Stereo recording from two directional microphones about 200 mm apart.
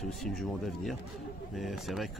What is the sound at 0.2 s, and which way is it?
Speech, centre (ahead or behind).